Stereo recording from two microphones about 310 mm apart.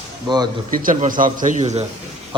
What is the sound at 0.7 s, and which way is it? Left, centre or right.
A man's voice, right.